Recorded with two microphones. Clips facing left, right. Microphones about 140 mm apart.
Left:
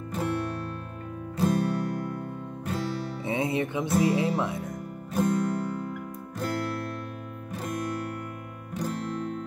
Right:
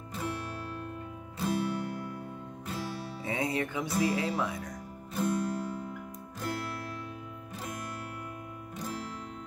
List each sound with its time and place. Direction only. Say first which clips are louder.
0.1 s music: left 7 dB; 55° left (ahead or behind)
2.6 s music: left 7 dB; 60° left (ahead or behind)
3.3 s music: left 4 dB; 25° left (ahead or behind)
5.1 s music: left 5 dB; 55° left (ahead or behind)
8.7 s music: left 8 dB; 55° left (ahead or behind)